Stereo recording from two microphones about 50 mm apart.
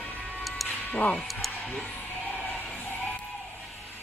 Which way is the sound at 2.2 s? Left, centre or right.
Left.